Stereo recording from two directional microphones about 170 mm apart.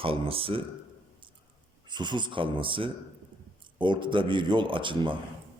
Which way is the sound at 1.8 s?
25° right (ahead or behind).